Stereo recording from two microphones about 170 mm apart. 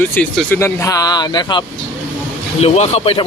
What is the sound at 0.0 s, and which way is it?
Speech, 10° left (ahead or behind).